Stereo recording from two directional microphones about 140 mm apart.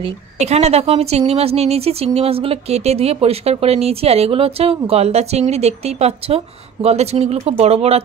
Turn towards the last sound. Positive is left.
turn(degrees=-45)  # may be behind; listen again after turning